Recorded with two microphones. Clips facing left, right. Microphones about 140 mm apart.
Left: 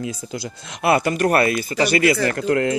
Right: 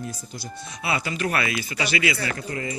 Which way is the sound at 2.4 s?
70° left (ahead or behind).